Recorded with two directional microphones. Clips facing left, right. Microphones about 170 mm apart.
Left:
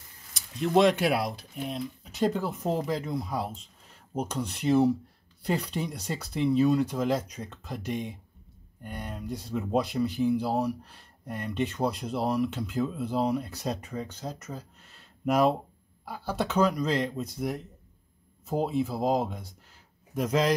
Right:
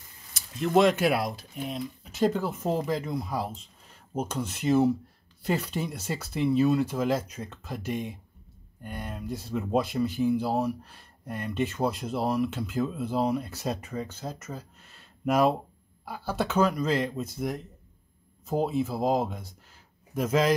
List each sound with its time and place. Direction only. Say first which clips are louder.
0.3 s speech: right 1 dB; centre (ahead or behind)